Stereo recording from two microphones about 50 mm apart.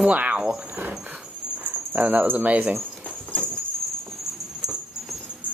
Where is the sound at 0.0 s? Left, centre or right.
Right.